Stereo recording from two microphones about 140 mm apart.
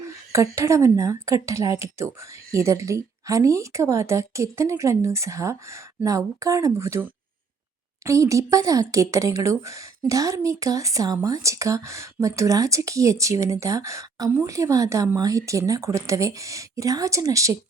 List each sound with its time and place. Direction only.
0.3 s speech: 20° right (ahead or behind)